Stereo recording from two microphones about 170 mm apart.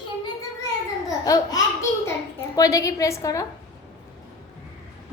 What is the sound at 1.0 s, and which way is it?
Speech, 20° left (ahead or behind).